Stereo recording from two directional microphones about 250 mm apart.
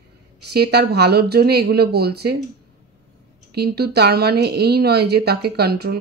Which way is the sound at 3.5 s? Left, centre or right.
Right.